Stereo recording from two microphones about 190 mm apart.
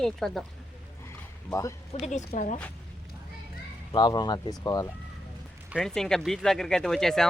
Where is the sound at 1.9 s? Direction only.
35° left (ahead or behind).